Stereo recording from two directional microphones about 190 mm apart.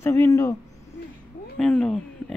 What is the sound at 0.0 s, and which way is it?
Speech, 15° left (ahead or behind).